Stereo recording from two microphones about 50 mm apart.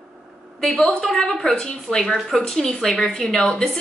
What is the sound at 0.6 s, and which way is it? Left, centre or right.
Speech, centre.